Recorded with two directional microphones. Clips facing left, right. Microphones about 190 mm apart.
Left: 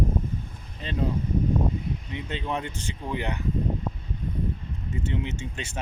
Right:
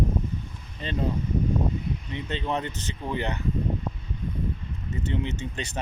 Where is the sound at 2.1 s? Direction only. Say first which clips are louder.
Right 2 dB; 5° left (ahead or behind).